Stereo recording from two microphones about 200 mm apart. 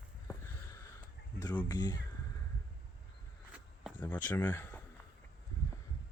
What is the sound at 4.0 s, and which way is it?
Speech, 10° left (ahead or behind).